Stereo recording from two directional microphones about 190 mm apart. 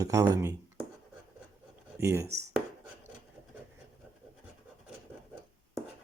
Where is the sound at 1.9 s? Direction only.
15° right (ahead or behind).